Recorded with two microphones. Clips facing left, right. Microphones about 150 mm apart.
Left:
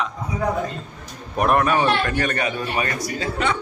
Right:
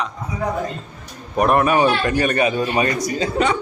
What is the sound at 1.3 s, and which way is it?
Speech, centre (ahead or behind).